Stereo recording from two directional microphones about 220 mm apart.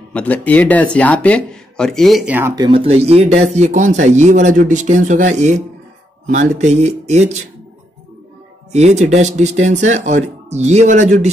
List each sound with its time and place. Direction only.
0.1 s speech: 5° left (ahead or behind); by 7.3 s 30° right (ahead or behind)
8.7 s speech: 30° right (ahead or behind)